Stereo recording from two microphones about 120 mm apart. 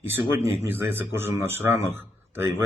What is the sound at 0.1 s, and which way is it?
A man's voice, 20° right (ahead or behind).